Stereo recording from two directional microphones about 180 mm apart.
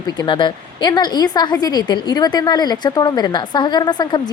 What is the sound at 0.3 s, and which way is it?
A woman's voice, 25° left (ahead or behind).